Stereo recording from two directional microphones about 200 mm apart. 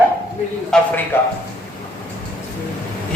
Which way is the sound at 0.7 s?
5° left (ahead or behind).